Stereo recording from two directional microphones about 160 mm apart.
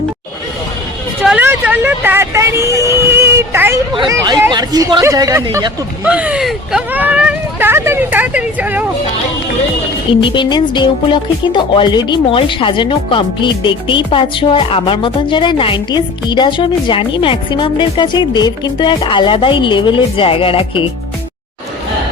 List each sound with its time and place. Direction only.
1.2 s speech: 5° right (ahead or behind)
4.5 s a woman's voice: 25° right (ahead or behind)
6.1 s speech: 5° right (ahead or behind)
10.1 s speech: 30° left (ahead or behind)